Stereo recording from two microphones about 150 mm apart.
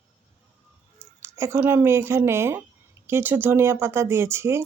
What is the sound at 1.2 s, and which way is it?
Speech, 15° right (ahead or behind).